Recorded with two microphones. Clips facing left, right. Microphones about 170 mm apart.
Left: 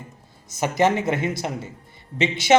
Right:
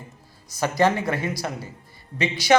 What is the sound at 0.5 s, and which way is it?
Speech, 20° left (ahead or behind).